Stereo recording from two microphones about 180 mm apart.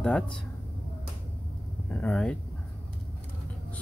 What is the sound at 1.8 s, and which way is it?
Speech, 5° left (ahead or behind).